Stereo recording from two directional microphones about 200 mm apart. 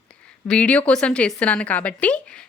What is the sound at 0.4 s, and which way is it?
A woman's voice, 5° left (ahead or behind).